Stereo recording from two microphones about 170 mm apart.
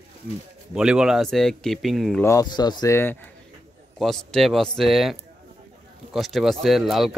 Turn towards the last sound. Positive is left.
turn(degrees=0)  # may be behind; listen again after turning